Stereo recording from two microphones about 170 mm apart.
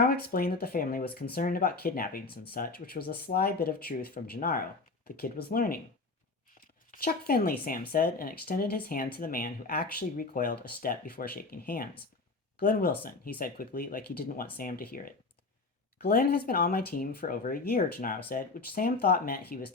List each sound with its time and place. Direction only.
0.0 s speech: 65° left (ahead or behind)
6.9 s speech: 60° left (ahead or behind)